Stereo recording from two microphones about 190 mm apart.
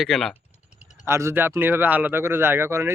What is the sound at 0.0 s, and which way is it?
Speech, centre (ahead or behind).